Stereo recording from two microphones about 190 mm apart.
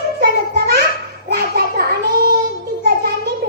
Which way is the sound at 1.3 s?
55° right (ahead or behind).